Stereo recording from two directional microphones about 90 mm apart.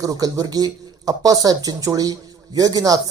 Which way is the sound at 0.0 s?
40° right (ahead or behind).